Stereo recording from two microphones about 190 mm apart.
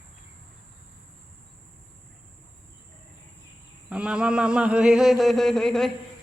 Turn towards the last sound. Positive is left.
turn(degrees=5)  # may be behind; listen again after turning